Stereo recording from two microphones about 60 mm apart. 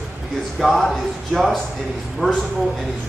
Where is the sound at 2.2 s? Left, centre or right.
Centre.